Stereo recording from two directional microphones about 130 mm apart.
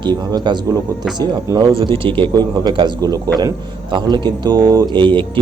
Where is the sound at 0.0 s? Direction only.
35° right (ahead or behind).